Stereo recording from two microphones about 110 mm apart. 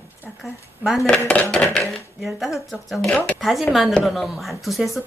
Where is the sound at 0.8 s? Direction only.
Centre (ahead or behind).